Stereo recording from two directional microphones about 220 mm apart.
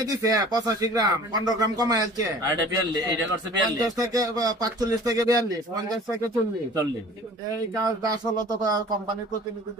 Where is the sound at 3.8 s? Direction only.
15° right (ahead or behind).